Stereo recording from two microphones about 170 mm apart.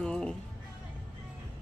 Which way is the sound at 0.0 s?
5° left (ahead or behind).